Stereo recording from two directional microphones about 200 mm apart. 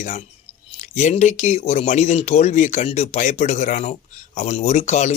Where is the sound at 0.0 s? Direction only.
35° left (ahead or behind).